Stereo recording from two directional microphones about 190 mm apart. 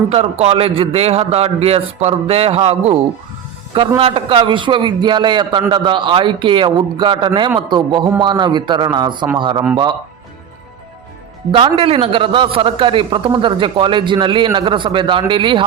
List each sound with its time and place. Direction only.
0.1 s a man's voice: 35° right (ahead or behind)
11.5 s a man's voice: 30° right (ahead or behind)